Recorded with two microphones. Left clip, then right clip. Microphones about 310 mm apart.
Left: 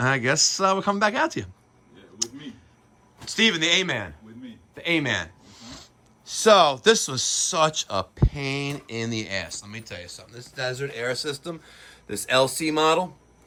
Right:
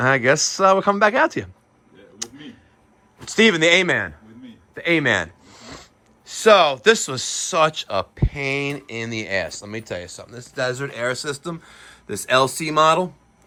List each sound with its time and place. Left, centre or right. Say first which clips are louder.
0.0 s a man's voice: right 5 dB; centre
2.1 s a sound: left 2 dB; centre
3.2 s a man's voice: right 6 dB; centre